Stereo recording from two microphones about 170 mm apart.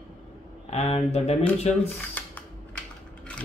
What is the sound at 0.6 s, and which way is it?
Speech, 40° left (ahead or behind).